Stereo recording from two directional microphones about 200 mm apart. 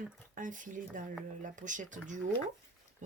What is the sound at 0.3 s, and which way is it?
Speech, 40° right (ahead or behind).